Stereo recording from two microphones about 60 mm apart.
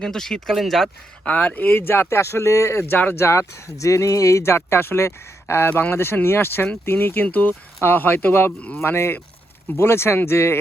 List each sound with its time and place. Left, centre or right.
0.0 s speech: centre
1.2 s speech: centre
1.6 s speech: left
2.0 s speech: left
2.9 s speech: left
3.2 s speech: left
4.5 s speech: left
7.3 s speech: left
7.8 s speech: left